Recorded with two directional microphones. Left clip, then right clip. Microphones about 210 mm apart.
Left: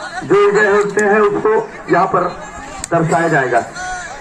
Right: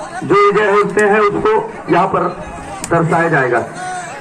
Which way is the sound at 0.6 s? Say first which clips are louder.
Right 1 dB; centre (ahead or behind).